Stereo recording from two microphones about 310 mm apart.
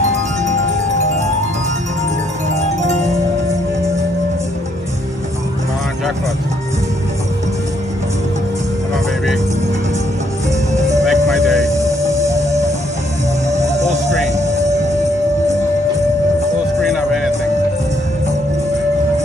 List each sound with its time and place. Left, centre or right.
11.1 s music: centre
13.5 s music: right
16.8 s music: centre